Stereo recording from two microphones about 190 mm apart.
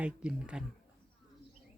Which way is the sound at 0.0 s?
5° right (ahead or behind).